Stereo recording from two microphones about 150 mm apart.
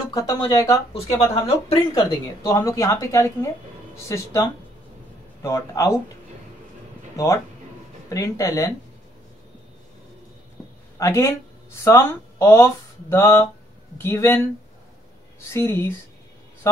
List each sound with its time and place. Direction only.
0.1 s a woman's voice: 25° left (ahead or behind)
0.9 s speech: 40° left (ahead or behind)
1.8 s a woman's voice: 25° left (ahead or behind)
8.1 s a woman's voice: 20° left (ahead or behind)
11.0 s a woman's voice: 20° left (ahead or behind)
15.5 s speech: 20° left (ahead or behind)